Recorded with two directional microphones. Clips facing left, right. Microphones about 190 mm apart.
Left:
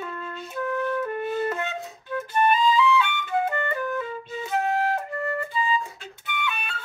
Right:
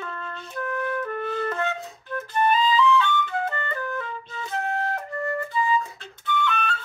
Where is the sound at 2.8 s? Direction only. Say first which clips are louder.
Right 2 dB; 15° left (ahead or behind).